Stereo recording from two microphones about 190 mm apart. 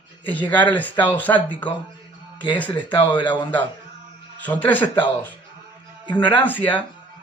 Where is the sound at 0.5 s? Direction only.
10° left (ahead or behind).